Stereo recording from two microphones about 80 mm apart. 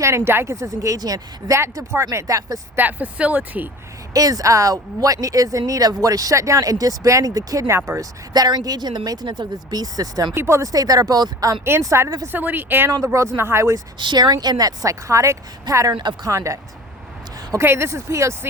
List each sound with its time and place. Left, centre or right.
0.0 s speech: right
1.5 s speech: right
2.7 s speech: centre
4.1 s speech: right
8.3 s speech: right
10.3 s speech: right
11.9 s speech: right
12.3 s speech: right
13.1 s speech: right
14.0 s speech: right
15.9 s speech: right
16.2 s speech: right